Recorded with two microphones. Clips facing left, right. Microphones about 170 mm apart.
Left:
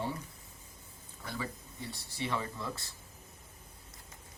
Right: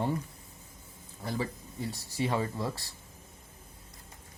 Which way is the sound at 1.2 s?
30° right (ahead or behind).